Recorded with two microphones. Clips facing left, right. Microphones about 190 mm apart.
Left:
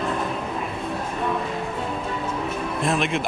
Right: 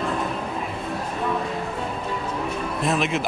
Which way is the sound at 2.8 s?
Centre (ahead or behind).